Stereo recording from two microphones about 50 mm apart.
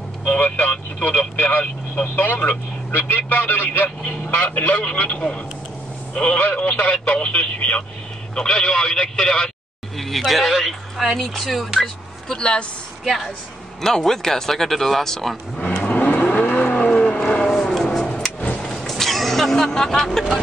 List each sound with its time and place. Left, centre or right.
0.3 s vehicle: left
1.0 s speech: left
4.1 s speech: left; by 11.7 s centre
11.8 s speech: centre
13.0 s speech: centre
13.7 s speech: centre
15.6 s vehicle: left
17.7 s tick-tock: centre
18.6 s music: centre